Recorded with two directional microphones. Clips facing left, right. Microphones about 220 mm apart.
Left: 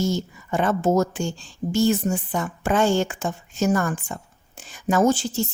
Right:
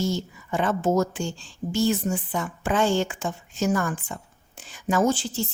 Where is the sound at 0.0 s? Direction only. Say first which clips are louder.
Left 2 dB; 45° left (ahead or behind).